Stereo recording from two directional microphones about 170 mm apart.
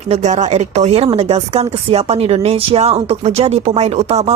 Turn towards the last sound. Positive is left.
turn(degrees=-40)  # may be behind; listen again after turning